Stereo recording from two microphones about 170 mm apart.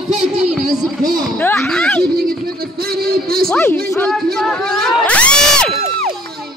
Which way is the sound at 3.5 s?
15° left (ahead or behind).